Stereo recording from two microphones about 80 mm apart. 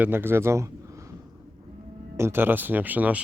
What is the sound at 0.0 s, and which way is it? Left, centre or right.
Speech, right.